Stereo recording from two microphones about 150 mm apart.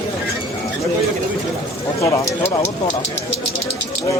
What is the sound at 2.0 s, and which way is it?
Speech, 20° left (ahead or behind).